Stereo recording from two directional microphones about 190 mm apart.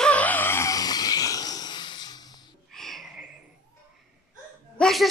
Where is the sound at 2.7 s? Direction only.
Centre (ahead or behind).